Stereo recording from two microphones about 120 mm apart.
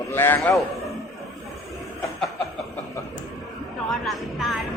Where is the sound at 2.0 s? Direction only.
Centre (ahead or behind).